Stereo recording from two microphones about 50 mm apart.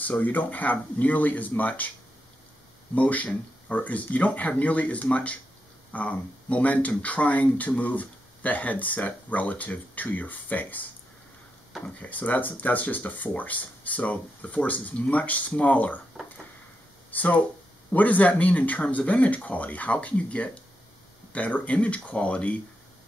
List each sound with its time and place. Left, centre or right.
0.0 s speech: left
2.9 s speech: left
17.1 s speech: left